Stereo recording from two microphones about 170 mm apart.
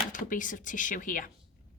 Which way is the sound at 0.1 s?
50° left (ahead or behind).